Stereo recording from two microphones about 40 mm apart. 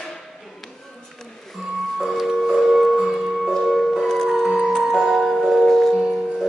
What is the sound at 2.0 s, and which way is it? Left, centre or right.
Music, centre.